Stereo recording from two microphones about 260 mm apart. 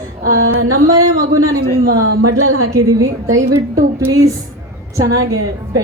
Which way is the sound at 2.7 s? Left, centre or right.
Centre.